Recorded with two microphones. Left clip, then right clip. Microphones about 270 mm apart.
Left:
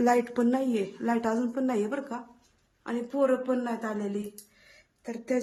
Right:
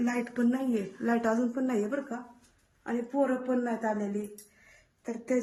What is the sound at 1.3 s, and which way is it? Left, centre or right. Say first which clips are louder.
Speech: left 1 dB; centre.